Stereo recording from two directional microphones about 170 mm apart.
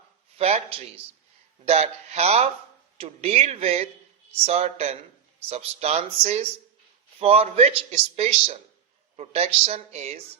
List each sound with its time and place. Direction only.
0.3 s speech: 35° right (ahead or behind)
1.6 s speech: 40° right (ahead or behind)